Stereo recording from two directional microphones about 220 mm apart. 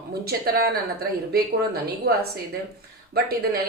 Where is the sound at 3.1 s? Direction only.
45° right (ahead or behind).